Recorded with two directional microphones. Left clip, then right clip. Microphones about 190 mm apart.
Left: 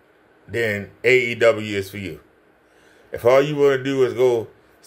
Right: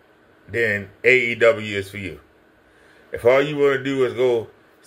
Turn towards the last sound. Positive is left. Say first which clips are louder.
# left 1 dB
turn(degrees=10)  # may be behind; listen again after turning